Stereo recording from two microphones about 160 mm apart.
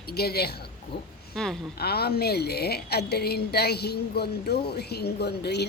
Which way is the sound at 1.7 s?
80° left.